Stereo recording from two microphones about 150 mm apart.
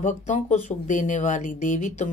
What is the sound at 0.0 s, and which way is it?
Speech, 55° left (ahead or behind).